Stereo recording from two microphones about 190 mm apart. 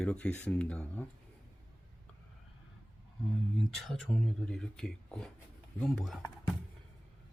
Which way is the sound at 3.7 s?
Centre (ahead or behind).